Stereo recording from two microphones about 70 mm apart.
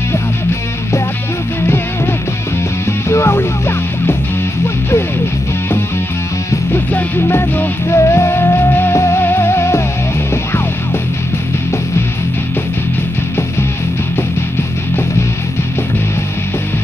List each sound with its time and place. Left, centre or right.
3.1 s music: left
6.7 s music: left